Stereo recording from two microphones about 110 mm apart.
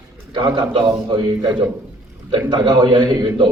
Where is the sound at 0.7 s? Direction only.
45° right (ahead or behind).